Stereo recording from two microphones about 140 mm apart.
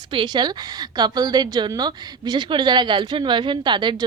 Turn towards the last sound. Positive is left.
turn(degrees=-35)  # may be behind; listen again after turning